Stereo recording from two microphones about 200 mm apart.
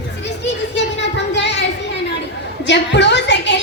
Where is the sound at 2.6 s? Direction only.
60° left (ahead or behind).